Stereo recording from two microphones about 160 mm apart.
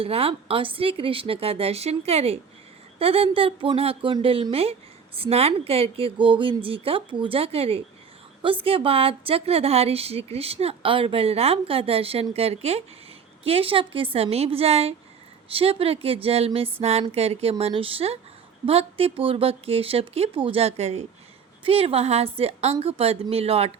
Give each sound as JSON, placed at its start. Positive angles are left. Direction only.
{"t": 0.0, "sound": "a woman's voice", "side_deg": -35}